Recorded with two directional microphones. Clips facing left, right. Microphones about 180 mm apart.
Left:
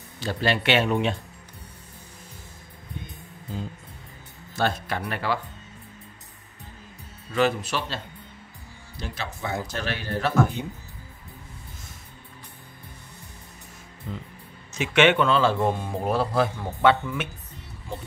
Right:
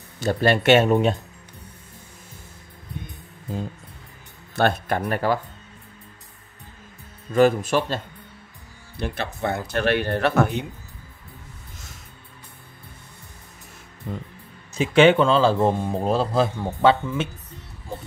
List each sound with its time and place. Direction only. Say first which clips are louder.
0.2 s speech: right 6 dB; 50° right (ahead or behind)
4.6 s speech: right 5 dB; 60° right (ahead or behind)
7.3 s speech: right 6 dB; 45° right (ahead or behind)
8.9 s a man's voice: right 6 dB; 60° right (ahead or behind)
14.7 s speech: right 5 dB; 30° right (ahead or behind)